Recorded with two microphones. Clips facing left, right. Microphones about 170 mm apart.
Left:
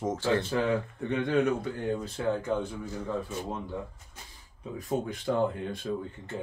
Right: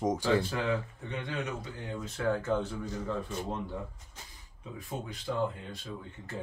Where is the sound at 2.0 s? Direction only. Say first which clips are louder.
Left 1 dB; 30° left (ahead or behind).